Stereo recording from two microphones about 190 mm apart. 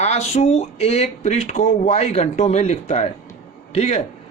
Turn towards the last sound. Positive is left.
turn(degrees=35)  # may be behind; listen again after turning